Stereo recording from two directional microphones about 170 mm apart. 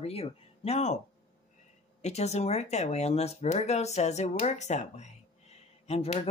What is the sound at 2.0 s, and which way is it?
Speech, 40° left (ahead or behind).